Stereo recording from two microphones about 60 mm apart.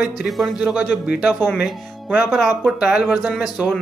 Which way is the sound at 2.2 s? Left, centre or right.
Centre.